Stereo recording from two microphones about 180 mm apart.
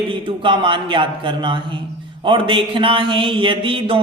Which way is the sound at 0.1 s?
30° right (ahead or behind).